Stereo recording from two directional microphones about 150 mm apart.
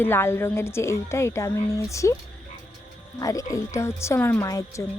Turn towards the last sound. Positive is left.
turn(degrees=20)  # may be behind; listen again after turning